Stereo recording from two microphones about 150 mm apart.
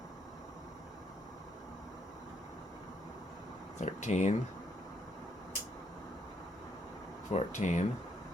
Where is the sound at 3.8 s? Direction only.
50° left (ahead or behind).